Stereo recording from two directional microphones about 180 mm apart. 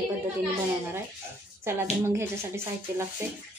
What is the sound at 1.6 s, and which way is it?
Speech, 15° right (ahead or behind).